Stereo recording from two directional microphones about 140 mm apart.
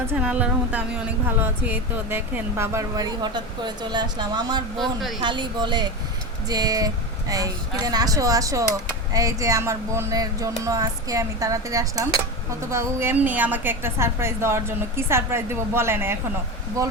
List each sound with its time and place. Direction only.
0.1 s a woman's voice: 10° right (ahead or behind); by 4.6 s 30° right (ahead or behind)
4.8 s speech: centre (ahead or behind)
5.2 s a woman's voice: 35° right (ahead or behind); by 16.1 s 15° right (ahead or behind)